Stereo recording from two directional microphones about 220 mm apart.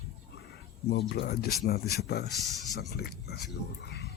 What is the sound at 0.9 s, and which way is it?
Speech, 50° left (ahead or behind).